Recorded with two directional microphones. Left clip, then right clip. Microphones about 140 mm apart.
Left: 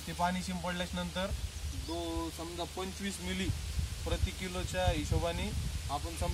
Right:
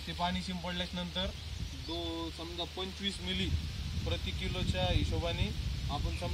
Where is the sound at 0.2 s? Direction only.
10° left (ahead or behind).